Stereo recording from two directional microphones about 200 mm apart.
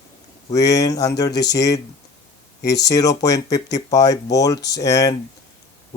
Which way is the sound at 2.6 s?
55° left (ahead or behind).